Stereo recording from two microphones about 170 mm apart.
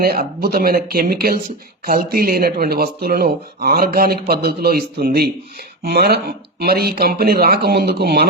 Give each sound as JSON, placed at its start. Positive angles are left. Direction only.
{"t": 0.0, "sound": "speech", "side_deg": -60}